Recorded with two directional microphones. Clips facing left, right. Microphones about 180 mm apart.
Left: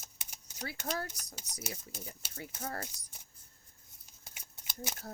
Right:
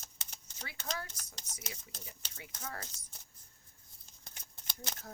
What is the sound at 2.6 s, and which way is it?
Speech, 45° left (ahead or behind).